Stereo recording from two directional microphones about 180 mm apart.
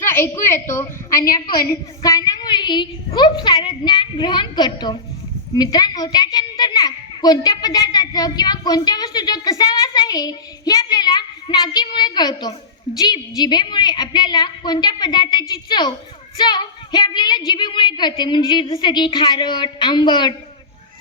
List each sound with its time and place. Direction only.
0.0 s a woman's voice: 15° left (ahead or behind)
1.2 s a woman's voice: 55° left (ahead or behind)
2.0 s a child's voice: 20° left (ahead or behind)